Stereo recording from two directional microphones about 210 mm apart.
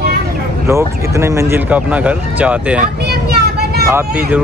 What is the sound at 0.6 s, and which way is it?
Speech, 15° right (ahead or behind).